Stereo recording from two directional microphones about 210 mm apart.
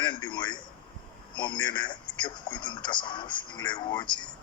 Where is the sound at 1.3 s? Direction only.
20° left (ahead or behind).